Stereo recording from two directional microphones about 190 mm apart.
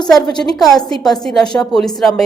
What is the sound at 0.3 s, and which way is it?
Speech, 20° left (ahead or behind).